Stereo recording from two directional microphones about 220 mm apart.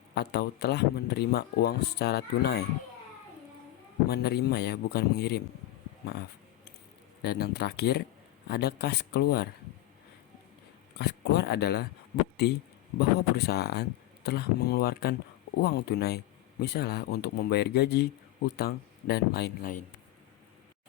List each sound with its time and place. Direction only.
0.1 s speech: 50° left (ahead or behind)
4.1 s speech: 45° left (ahead or behind)
7.2 s speech: 45° left (ahead or behind)
10.9 s speech: 50° left (ahead or behind)